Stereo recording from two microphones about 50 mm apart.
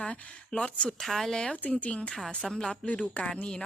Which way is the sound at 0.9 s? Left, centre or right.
Centre.